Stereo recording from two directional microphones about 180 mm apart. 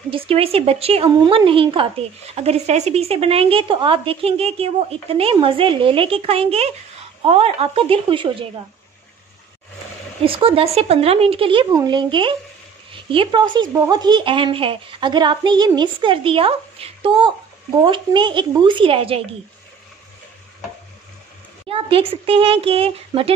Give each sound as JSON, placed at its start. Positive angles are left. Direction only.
{"t": 0.1, "sound": "speech", "side_deg": -30}
{"t": 10.2, "sound": "a woman's voice", "side_deg": -30}
{"t": 21.6, "sound": "speech", "side_deg": -30}